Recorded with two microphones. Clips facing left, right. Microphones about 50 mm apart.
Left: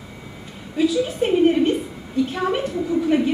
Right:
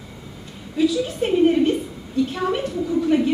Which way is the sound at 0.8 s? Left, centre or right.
Centre.